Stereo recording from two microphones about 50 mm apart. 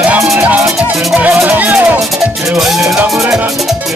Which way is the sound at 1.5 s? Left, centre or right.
Right.